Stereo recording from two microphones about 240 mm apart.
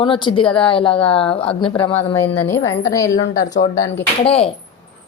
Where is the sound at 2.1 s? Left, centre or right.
Centre.